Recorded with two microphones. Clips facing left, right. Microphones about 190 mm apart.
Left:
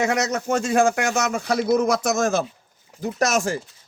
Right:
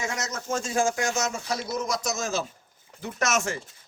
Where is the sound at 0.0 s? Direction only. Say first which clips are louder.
Left 10 dB; 65° left (ahead or behind).